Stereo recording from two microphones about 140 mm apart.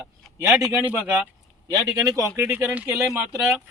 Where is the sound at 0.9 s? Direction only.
15° right (ahead or behind).